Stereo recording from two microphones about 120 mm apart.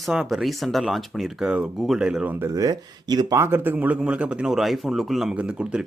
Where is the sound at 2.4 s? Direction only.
30° right (ahead or behind).